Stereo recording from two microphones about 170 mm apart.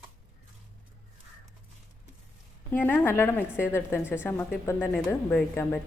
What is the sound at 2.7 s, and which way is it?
A woman's voice, 10° left (ahead or behind).